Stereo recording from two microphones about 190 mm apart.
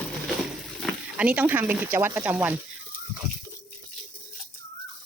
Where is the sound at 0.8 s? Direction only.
5° right (ahead or behind).